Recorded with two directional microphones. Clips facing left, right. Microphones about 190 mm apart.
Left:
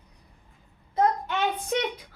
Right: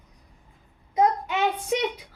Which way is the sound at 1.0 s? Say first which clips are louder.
Right 2 dB; 10° right (ahead or behind).